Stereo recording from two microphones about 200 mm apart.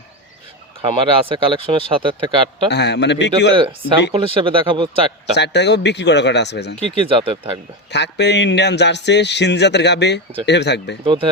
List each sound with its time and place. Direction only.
0.8 s speech: 25° right (ahead or behind)
2.6 s a man's voice: 60° left (ahead or behind)
3.5 s speech: 25° right (ahead or behind)
5.3 s a man's voice: 60° left (ahead or behind)
6.9 s speech: 25° right (ahead or behind)
7.9 s a man's voice: 60° left (ahead or behind)
11.0 s speech: 25° right (ahead or behind)